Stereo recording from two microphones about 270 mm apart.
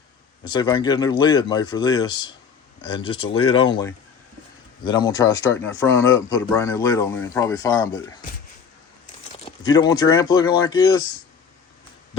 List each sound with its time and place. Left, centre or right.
0.4 s speech: centre
9.4 s speech: centre